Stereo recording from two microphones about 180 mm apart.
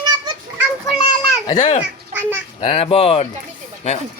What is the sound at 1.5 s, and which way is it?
Speech, 40° left (ahead or behind).